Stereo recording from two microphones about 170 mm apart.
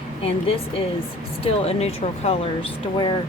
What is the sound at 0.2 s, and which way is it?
Speech, 35° left (ahead or behind).